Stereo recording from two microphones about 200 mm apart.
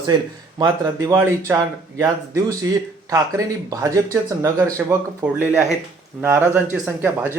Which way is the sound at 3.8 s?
15° right (ahead or behind).